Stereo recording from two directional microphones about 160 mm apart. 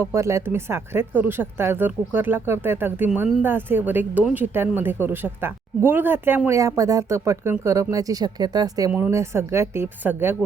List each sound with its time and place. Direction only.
0.0 s speech: 15° right (ahead or behind)